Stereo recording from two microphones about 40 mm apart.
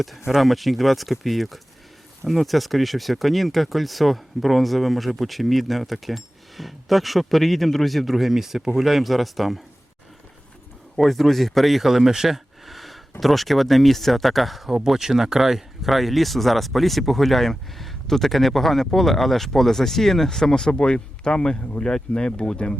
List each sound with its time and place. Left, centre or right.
0.3 s speech: centre
10.9 s speech: centre